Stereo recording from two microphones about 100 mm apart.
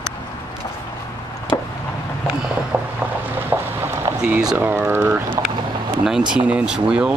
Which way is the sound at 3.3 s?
20° right (ahead or behind).